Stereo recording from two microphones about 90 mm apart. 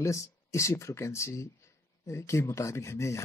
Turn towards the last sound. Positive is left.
turn(degrees=30)  # may be behind; listen again after turning